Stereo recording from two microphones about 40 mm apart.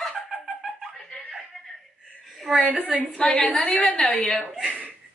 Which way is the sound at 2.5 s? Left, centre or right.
Centre.